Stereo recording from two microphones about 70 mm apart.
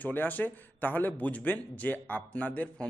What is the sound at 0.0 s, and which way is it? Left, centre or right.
Speech, left.